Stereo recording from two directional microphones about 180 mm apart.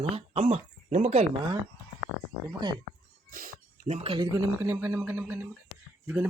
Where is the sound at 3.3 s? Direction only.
50° right (ahead or behind).